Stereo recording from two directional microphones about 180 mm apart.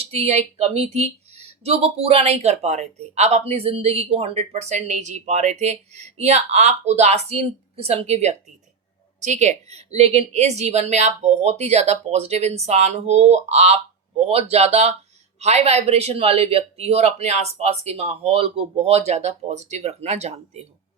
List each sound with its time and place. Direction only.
0.0 s speech: 35° right (ahead or behind)